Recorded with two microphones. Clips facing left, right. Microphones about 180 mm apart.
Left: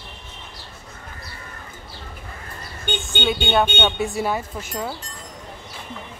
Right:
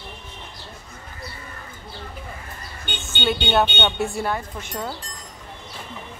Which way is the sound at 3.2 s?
Centre (ahead or behind).